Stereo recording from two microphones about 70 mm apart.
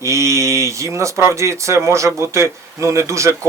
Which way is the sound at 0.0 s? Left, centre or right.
Right.